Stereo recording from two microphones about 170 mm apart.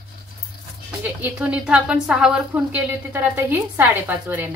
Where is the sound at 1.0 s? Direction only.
10° right (ahead or behind).